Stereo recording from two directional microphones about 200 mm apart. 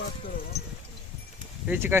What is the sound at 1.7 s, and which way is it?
Speech, 10° right (ahead or behind).